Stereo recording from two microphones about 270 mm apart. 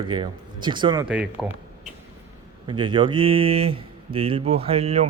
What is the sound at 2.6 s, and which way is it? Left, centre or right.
Speech, centre.